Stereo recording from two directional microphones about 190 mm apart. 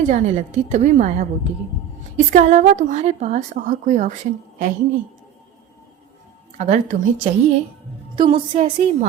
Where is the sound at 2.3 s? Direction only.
40° right (ahead or behind).